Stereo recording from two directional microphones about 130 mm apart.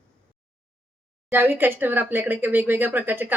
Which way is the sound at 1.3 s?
15° right (ahead or behind).